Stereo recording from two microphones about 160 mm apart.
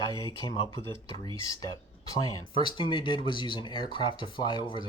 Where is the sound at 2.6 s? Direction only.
30° left (ahead or behind).